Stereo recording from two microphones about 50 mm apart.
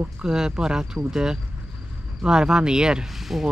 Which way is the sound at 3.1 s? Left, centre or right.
Centre.